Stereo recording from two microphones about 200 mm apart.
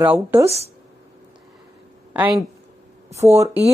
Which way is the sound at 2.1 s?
10° right (ahead or behind).